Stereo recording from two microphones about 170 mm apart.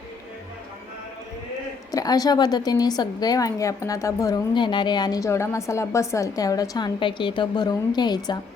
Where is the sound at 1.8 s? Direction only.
20° left (ahead or behind).